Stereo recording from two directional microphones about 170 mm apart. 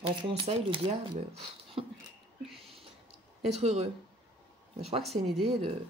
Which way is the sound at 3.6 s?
40° right (ahead or behind).